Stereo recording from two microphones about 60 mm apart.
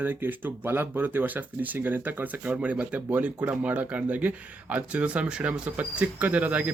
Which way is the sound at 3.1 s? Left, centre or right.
Right.